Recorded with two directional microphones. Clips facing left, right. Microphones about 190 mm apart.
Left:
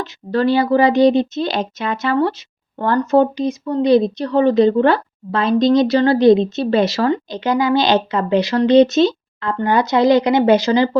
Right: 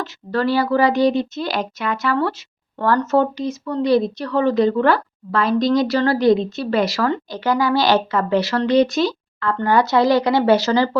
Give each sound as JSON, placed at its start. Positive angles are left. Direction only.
{"t": 0.0, "sound": "a woman's voice", "side_deg": 20}